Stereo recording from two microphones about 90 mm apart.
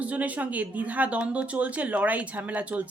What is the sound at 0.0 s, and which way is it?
A woman's voice, 15° right (ahead or behind).